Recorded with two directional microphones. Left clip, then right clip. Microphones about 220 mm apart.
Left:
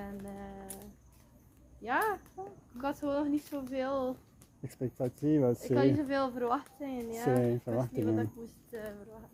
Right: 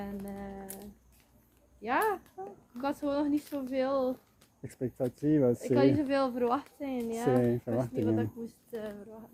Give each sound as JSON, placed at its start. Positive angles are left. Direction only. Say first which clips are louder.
{"t": 0.0, "sound": "a sound", "louder": "right 3 dB", "side_deg": -5}
{"t": 1.8, "sound": "speech", "louder": "right 2 dB", "side_deg": 0}
{"t": 4.6, "sound": "speech", "louder": "right 2 dB", "side_deg": 15}
{"t": 5.5, "sound": "speech", "louder": "right 2 dB", "side_deg": -5}
{"t": 7.3, "sound": "speech", "louder": "right 1 dB", "side_deg": 15}
{"t": 8.0, "sound": "speech", "louder": "right 2 dB", "side_deg": 0}